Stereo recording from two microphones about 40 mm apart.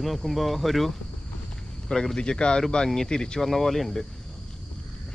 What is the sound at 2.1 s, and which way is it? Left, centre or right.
Speech, left.